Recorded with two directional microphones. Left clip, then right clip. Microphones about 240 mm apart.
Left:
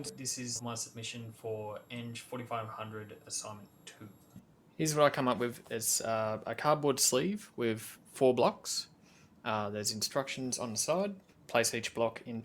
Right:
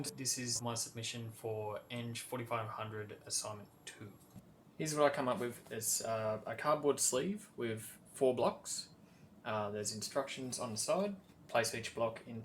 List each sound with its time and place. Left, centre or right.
0.0 s speech: centre
4.8 s speech: left